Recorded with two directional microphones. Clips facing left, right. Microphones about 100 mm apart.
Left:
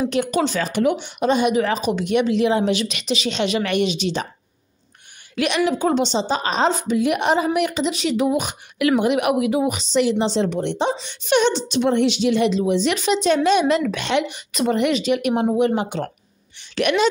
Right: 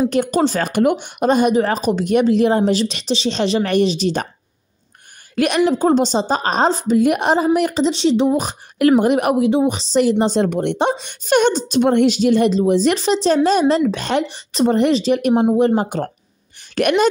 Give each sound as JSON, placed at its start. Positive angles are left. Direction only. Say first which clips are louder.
{"t": 0.1, "sound": "a woman's voice", "louder": "right 4 dB", "side_deg": -40}
{"t": 0.7, "sound": "a woman's voice", "louder": "right 3 dB", "side_deg": -50}
{"t": 5.3, "sound": "a woman's voice", "louder": "right 4 dB", "side_deg": -45}
{"t": 11.1, "sound": "a woman's voice", "louder": "right 3 dB", "side_deg": -45}
{"t": 16.5, "sound": "a sound", "louder": "right 3 dB", "side_deg": -45}